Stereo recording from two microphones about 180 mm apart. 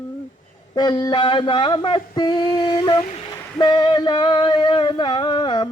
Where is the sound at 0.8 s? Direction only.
20° left (ahead or behind).